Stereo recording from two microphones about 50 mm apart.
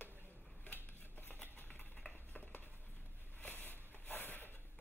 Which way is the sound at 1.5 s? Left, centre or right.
Left.